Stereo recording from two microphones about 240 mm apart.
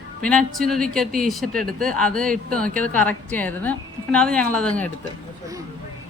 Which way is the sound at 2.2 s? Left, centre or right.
Right.